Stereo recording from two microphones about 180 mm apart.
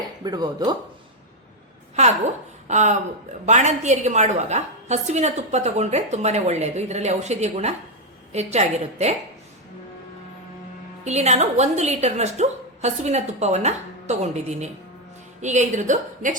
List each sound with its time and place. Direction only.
0.3 s speech: 25° right (ahead or behind)
2.0 s a woman's voice: 40° right (ahead or behind)
11.0 s a woman's voice: 40° right (ahead or behind)